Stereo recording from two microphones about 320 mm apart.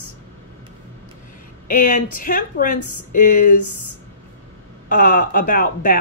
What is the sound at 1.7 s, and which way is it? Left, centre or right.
Speech, left.